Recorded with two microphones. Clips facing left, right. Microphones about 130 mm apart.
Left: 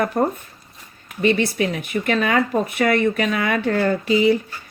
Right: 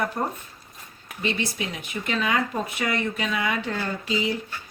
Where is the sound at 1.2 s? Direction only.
60° left (ahead or behind).